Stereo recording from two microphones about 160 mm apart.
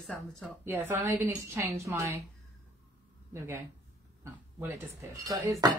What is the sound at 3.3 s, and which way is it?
A woman's voice, 15° right (ahead or behind).